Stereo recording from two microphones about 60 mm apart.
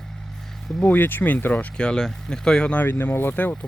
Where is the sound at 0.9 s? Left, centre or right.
Left.